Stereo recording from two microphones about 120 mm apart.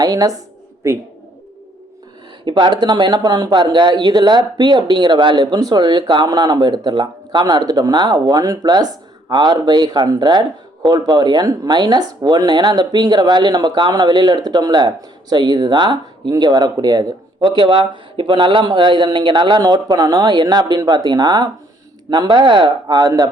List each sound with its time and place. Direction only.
0.0 s speech: 30° right (ahead or behind)
2.4 s speech: 40° right (ahead or behind)
23.0 s speech: 30° right (ahead or behind)